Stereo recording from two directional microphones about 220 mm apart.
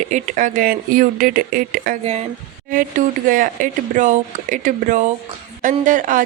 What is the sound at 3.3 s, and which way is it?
Speech, 40° right (ahead or behind).